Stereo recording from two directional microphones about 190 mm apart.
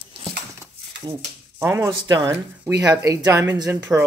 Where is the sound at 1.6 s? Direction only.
15° right (ahead or behind).